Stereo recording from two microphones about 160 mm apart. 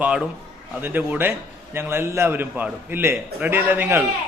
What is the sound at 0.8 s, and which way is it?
A man's voice, 10° right (ahead or behind).